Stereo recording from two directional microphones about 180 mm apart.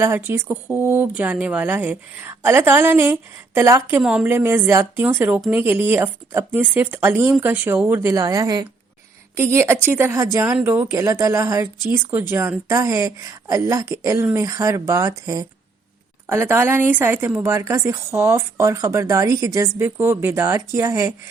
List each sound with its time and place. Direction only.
0.0 s speech: 10° right (ahead or behind)